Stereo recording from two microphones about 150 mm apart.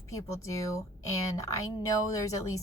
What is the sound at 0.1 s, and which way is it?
A woman's voice, 20° left (ahead or behind).